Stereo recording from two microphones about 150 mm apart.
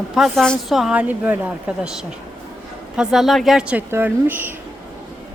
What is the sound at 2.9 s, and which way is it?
A woman's voice, centre (ahead or behind).